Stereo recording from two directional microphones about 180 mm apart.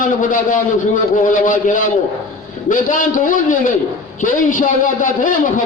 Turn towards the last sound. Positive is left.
turn(degrees=45)  # may be behind; listen again after turning